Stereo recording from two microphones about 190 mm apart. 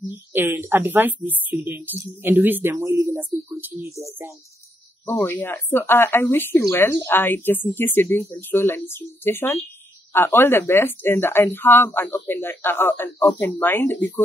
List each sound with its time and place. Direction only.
0.3 s a woman's voice: 10° right (ahead or behind)
5.0 s speech: 10° left (ahead or behind)